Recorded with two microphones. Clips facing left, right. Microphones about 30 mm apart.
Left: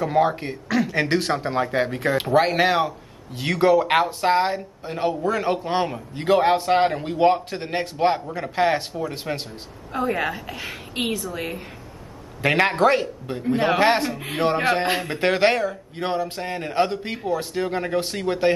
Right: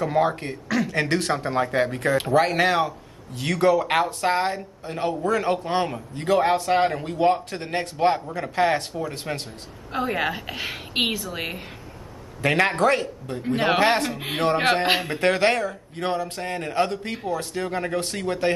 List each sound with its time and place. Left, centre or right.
0.0 s speech: centre
2.0 s speech: centre
6.1 s speech: left
9.9 s a woman's voice: centre; by 11.6 s right
12.4 s speech: centre
14.1 s a woman's voice: centre
15.0 s speech: centre